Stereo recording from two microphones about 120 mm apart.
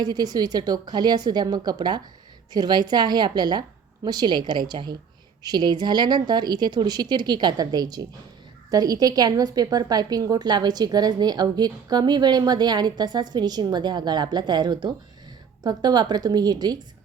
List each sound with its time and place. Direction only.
0.0 s a woman's voice: 35° right (ahead or behind)